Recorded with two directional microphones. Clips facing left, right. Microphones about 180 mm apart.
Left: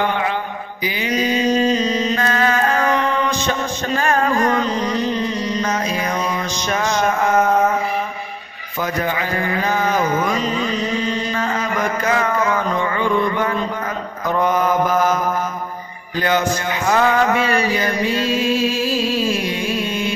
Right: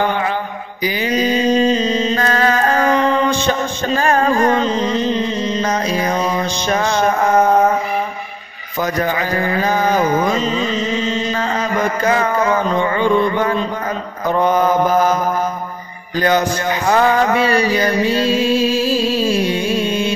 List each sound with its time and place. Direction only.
0.8 s mantra: 35° right (ahead or behind)
2.2 s music: 35° right (ahead or behind)
5.7 s mantra: 35° right (ahead or behind)
8.8 s mantra: 40° right (ahead or behind); by 11.2 s 20° right (ahead or behind)
12.0 s a sound: 30° right (ahead or behind)
14.2 s mantra: 30° right (ahead or behind)
16.2 s music: 40° right (ahead or behind)